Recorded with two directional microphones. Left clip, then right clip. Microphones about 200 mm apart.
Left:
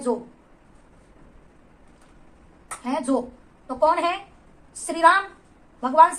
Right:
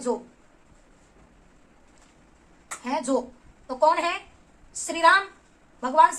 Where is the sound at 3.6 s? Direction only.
35° right (ahead or behind).